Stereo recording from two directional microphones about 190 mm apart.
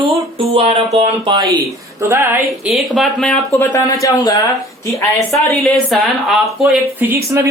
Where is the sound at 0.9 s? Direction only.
25° right (ahead or behind).